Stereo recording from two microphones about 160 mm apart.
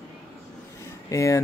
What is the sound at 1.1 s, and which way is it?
Speech, 20° left (ahead or behind).